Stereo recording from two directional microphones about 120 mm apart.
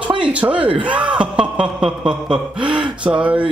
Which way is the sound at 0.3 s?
10° right (ahead or behind).